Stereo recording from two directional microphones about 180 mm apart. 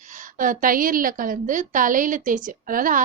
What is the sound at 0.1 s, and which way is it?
A woman's voice, 45° right (ahead or behind).